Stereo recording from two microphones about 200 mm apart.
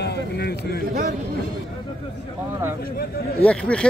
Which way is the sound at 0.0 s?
55° left (ahead or behind).